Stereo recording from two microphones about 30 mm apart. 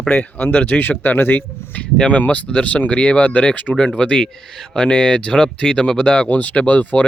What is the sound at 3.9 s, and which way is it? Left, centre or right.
Speech, left.